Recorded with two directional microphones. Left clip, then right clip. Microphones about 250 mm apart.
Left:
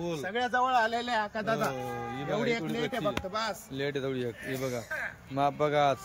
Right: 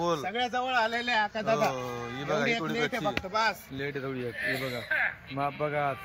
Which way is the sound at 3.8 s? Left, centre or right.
Left.